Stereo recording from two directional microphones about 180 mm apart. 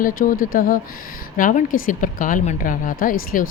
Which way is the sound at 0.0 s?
50° left (ahead or behind).